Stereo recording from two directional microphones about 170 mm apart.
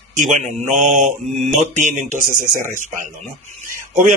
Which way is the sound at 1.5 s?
45° right (ahead or behind).